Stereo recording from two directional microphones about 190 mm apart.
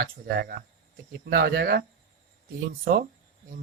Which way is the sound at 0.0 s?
50° right (ahead or behind).